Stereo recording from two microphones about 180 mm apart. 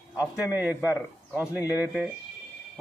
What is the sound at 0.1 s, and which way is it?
A man's voice, 5° right (ahead or behind).